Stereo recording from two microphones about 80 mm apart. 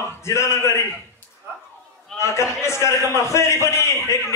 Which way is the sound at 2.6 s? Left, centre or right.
Left.